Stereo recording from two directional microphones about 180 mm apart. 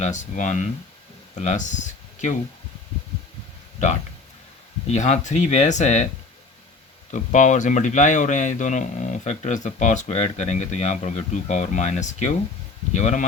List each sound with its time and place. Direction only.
0.0 s speech: 45° left (ahead or behind)
3.8 s speech: 40° left (ahead or behind)
7.1 s speech: 45° left (ahead or behind)